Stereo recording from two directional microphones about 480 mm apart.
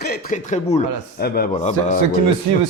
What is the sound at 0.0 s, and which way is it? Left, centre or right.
A man's voice, centre.